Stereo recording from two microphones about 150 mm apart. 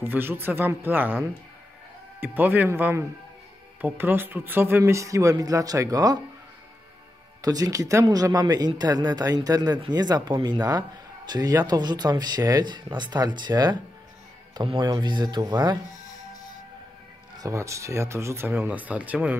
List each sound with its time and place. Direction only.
0.0 s speech: 15° right (ahead or behind)
2.2 s speech: 10° right (ahead or behind)
7.4 s speech: 25° right (ahead or behind)
17.4 s speech: 20° right (ahead or behind)